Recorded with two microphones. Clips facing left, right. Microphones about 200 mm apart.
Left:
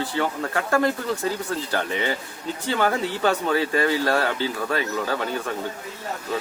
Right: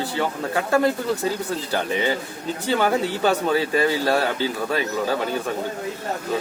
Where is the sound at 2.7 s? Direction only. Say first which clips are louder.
Right 2 dB; 10° right (ahead or behind).